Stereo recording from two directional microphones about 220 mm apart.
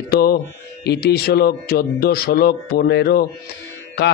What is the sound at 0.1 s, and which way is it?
Mantra, 45° left (ahead or behind).